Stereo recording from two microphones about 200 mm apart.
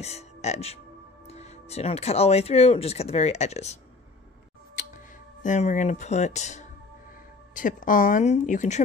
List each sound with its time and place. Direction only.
0.0 s speech: 35° left (ahead or behind)
4.7 s speech: 40° left (ahead or behind)